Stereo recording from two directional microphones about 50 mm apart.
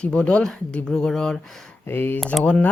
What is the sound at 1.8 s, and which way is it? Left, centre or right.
Speech, left.